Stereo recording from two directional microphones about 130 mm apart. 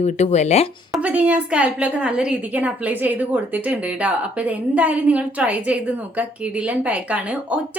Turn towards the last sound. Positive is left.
turn(degrees=-10)  # may be behind; listen again after turning